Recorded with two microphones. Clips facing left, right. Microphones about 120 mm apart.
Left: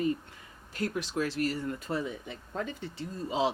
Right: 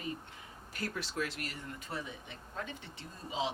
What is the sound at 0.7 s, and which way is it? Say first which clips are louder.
Speech: left 7 dB; 20° left (ahead or behind).